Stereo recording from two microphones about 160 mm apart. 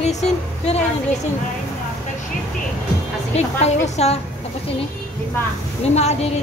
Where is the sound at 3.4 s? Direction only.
45° left (ahead or behind).